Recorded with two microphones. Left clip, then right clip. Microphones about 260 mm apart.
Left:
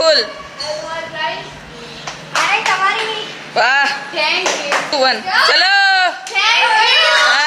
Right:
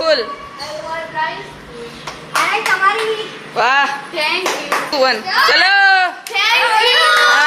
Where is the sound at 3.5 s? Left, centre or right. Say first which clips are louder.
Left 1 dB; centre.